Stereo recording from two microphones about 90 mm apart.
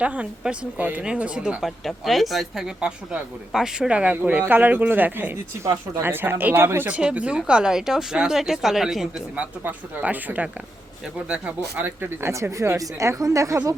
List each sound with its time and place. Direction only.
0.0 s speech: 15° right (ahead or behind)
1.8 s speech: centre (ahead or behind); by 6.8 s 25° right (ahead or behind)
6.8 s speech: 10° right (ahead or behind)
9.3 s speech: 15° right (ahead or behind)
12.2 s speech: 35° right (ahead or behind)